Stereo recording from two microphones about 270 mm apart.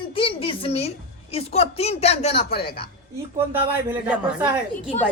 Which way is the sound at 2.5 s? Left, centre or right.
Left.